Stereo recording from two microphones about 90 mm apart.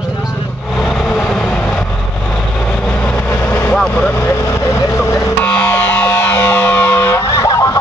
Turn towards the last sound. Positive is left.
turn(degrees=40)  # may be behind; listen again after turning